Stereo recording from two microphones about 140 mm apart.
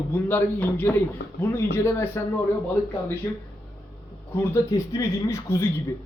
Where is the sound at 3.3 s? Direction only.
20° left (ahead or behind).